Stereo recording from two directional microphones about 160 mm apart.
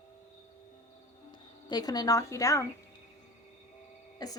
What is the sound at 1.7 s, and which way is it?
Speech, 25° left (ahead or behind).